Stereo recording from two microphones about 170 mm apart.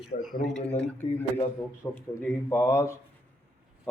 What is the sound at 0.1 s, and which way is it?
Speech, 50° left (ahead or behind).